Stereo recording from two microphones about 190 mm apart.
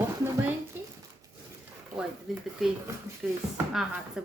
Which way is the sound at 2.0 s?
Centre (ahead or behind).